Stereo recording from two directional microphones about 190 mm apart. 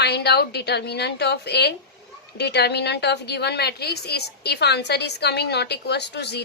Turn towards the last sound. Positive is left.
turn(degrees=60)  # may be behind; listen again after turning